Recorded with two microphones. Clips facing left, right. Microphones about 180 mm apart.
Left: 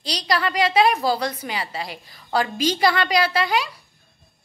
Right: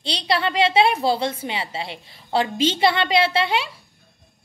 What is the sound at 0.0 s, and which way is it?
A woman's voice, 25° right (ahead or behind).